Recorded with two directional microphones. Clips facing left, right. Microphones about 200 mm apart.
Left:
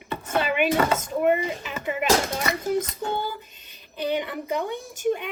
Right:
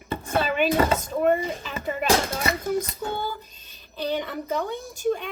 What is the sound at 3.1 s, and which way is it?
Speech, 15° left (ahead or behind).